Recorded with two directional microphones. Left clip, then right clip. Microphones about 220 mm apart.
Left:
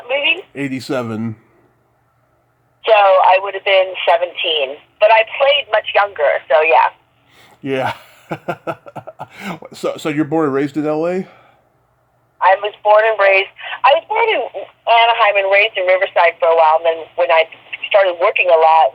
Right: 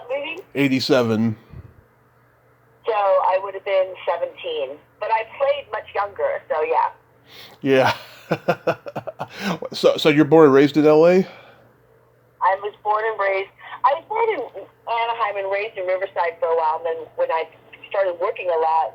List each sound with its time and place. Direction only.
0.1 s a sound: 25° left (ahead or behind)
0.5 s speech: 5° right (ahead or behind)
2.8 s speech: 25° left (ahead or behind)
7.4 s speech: centre (ahead or behind)
12.4 s speech: 20° left (ahead or behind)